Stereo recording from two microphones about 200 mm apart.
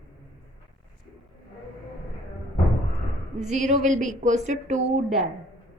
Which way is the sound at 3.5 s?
35° right (ahead or behind).